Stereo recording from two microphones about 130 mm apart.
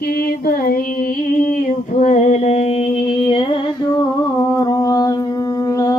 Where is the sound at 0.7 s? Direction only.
90° left.